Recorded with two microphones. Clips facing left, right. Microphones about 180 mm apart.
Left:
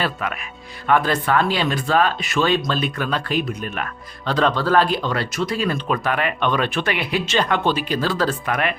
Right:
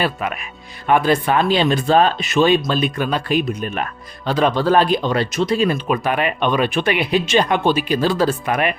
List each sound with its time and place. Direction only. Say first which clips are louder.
0.0 s speech: right 3 dB; 20° right (ahead or behind)
5.7 s speech: right 3 dB; 10° right (ahead or behind)